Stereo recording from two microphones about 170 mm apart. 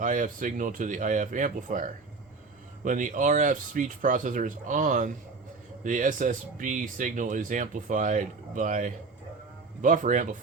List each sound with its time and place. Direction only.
0.0 s speech: 50° right (ahead or behind)